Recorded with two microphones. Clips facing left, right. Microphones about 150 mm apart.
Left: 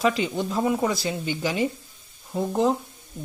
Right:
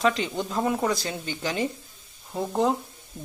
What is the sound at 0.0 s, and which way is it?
Speech, 5° left (ahead or behind).